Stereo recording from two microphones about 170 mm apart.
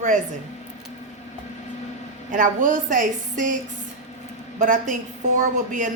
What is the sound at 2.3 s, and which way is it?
A woman's voice, 50° right (ahead or behind).